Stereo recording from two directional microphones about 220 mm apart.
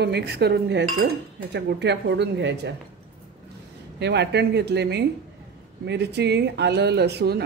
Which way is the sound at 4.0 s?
50° right (ahead or behind).